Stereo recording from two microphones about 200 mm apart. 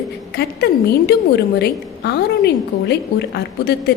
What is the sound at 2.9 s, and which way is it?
Speech, 55° left (ahead or behind).